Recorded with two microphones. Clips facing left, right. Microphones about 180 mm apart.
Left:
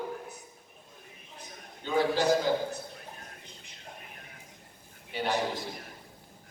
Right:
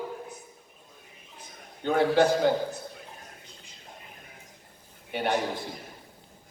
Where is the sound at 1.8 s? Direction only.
60° right (ahead or behind).